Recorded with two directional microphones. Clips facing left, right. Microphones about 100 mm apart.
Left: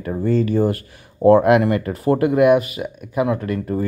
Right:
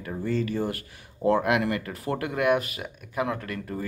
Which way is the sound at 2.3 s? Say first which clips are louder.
Left 8 dB; 15° left (ahead or behind).